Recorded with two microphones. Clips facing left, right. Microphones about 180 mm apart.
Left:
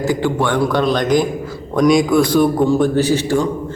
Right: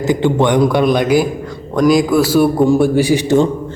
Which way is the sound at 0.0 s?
20° right (ahead or behind).